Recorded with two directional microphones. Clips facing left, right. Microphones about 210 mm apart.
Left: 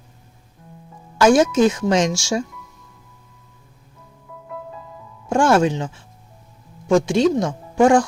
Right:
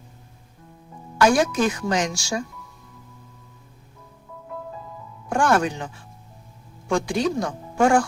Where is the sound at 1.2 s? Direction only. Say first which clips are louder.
Left 5 dB; 20° left (ahead or behind).